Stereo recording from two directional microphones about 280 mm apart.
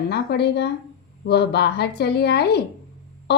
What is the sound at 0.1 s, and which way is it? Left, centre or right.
A woman's voice, left.